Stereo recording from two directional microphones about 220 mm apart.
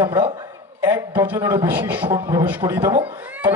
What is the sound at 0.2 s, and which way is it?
A man's voice, 20° right (ahead or behind).